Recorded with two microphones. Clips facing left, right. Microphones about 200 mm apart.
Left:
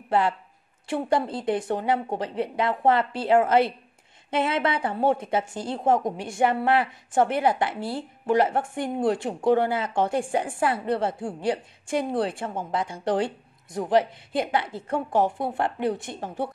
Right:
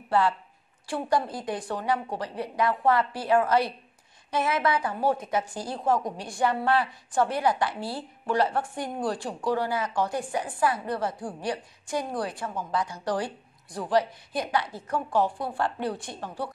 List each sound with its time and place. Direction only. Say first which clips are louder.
0.8 s a woman's voice: left 2 dB; 25° left (ahead or behind)